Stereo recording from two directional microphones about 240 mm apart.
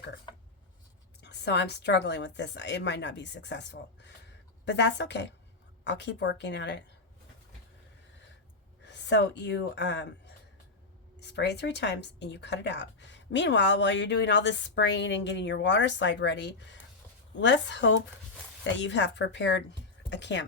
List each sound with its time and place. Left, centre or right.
1.2 s a woman's voice: left
8.8 s speech: left
11.2 s a woman's voice: left
20.1 s a sound: left